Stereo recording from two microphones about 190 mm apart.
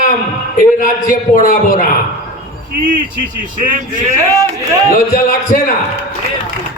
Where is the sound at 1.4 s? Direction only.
45° left (ahead or behind).